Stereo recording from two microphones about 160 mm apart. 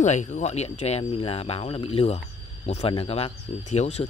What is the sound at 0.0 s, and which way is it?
Speech, 45° left (ahead or behind).